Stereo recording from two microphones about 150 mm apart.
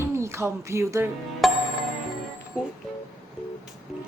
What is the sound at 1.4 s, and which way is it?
Music, centre (ahead or behind).